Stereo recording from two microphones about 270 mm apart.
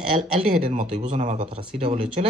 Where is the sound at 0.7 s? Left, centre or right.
Right.